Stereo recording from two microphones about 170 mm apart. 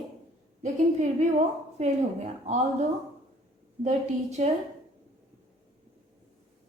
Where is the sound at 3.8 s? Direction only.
40° right (ahead or behind).